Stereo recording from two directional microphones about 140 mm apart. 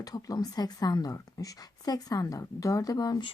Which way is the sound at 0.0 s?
25° left (ahead or behind).